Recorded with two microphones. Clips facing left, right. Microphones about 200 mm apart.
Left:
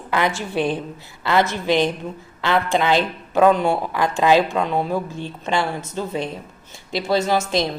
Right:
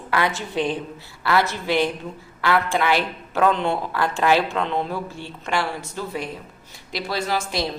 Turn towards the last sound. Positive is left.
turn(degrees=25)  # may be behind; listen again after turning